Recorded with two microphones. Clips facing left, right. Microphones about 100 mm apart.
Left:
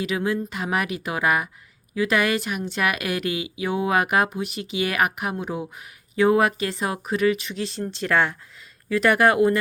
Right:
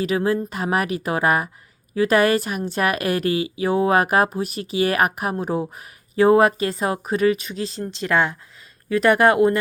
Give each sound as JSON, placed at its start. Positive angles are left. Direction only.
{"t": 0.0, "sound": "a woman's voice", "side_deg": -40}